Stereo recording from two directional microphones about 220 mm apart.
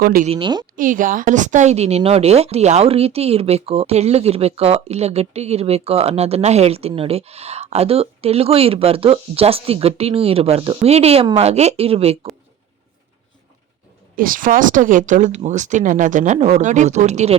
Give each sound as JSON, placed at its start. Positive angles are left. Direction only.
{"t": 0.0, "sound": "speech", "side_deg": -40}
{"t": 0.3, "sound": "a woman's voice", "side_deg": -20}
{"t": 0.8, "sound": "a woman's voice", "side_deg": -35}
{"t": 14.2, "sound": "speech", "side_deg": -40}